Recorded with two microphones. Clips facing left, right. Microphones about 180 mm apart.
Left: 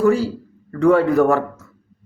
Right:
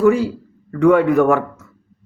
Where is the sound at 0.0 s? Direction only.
35° left (ahead or behind).